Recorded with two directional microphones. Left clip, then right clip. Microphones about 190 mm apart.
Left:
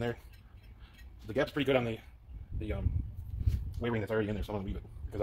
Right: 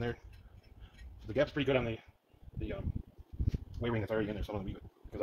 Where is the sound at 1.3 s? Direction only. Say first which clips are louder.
Left 1 dB; 25° left (ahead or behind).